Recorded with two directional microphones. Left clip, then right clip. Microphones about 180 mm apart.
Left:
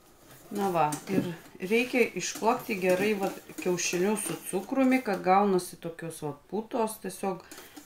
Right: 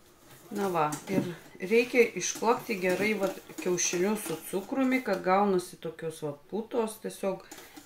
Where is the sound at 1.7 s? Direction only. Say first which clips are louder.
Right 2 dB; 40° left (ahead or behind).